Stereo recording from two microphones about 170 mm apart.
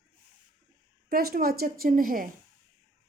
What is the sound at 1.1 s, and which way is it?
A woman's voice, 60° right (ahead or behind).